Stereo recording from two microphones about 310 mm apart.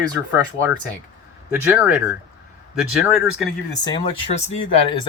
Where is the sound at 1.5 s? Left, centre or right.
Centre.